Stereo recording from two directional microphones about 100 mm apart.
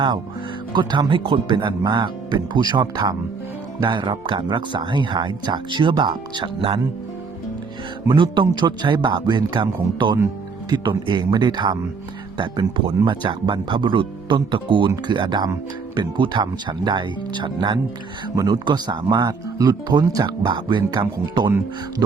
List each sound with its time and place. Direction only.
0.7 s speech: 50° right (ahead or behind)
3.8 s speech: 50° right (ahead or behind)
8.0 s speech: 55° right (ahead or behind)
10.7 s music: 45° right (ahead or behind)
11.1 s speech: 50° right (ahead or behind)